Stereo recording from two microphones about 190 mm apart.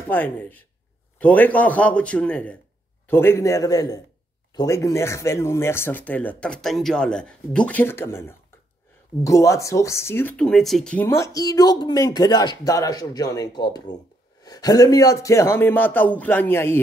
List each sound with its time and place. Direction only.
0.1 s speech: 10° left (ahead or behind)